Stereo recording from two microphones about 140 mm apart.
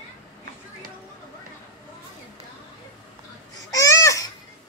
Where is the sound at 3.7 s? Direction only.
25° left (ahead or behind).